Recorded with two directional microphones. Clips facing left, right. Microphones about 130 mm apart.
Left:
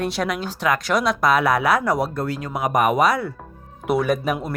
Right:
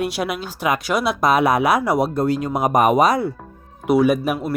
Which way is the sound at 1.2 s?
20° right (ahead or behind).